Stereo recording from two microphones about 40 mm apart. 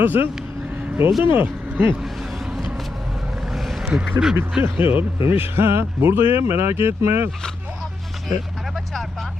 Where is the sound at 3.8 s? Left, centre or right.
Right.